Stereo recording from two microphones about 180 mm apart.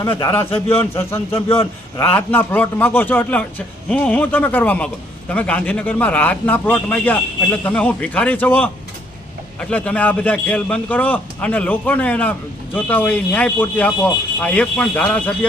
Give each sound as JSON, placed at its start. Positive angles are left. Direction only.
{"t": 0.0, "sound": "a man's voice", "side_deg": 15}